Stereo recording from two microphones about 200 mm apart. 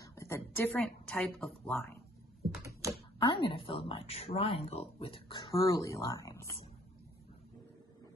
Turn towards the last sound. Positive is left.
turn(degrees=15)  # may be behind; listen again after turning